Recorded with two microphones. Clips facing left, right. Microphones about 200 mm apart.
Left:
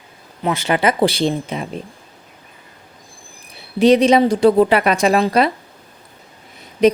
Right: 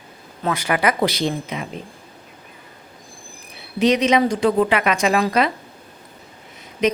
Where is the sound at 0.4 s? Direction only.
25° left (ahead or behind).